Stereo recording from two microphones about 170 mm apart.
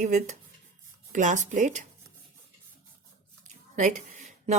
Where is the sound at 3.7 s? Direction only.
45° right (ahead or behind).